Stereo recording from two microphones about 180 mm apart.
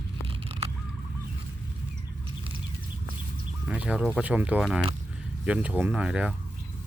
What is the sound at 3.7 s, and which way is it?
Bird, 5° right (ahead or behind).